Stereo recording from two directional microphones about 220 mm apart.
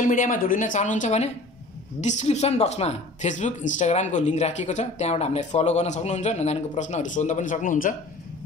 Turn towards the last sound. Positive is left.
turn(degrees=35)  # may be behind; listen again after turning